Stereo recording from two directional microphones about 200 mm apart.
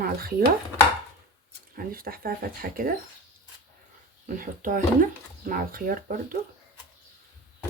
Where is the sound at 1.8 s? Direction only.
45° right (ahead or behind).